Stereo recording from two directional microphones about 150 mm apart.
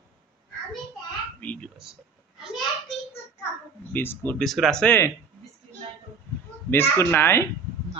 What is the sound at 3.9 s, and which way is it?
Speech, 10° left (ahead or behind).